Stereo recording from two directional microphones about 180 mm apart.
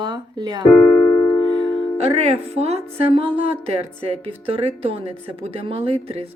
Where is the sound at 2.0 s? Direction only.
35° right (ahead or behind).